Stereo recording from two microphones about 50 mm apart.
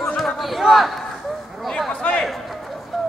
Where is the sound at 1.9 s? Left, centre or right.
Left.